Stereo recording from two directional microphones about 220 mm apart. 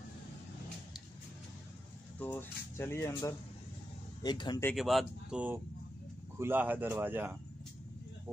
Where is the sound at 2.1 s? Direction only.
10° left (ahead or behind).